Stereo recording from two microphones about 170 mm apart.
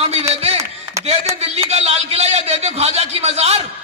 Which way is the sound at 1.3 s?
35° right (ahead or behind).